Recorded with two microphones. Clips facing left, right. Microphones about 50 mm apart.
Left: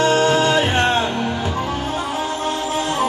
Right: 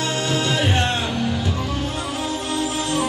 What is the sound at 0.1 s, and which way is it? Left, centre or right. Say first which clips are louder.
Music: left 7 dB; left.